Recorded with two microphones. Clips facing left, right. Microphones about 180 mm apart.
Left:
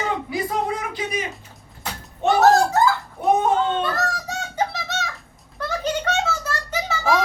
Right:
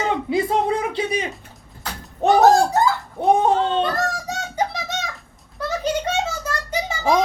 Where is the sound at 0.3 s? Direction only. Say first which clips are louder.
Right 5 dB; 25° right (ahead or behind).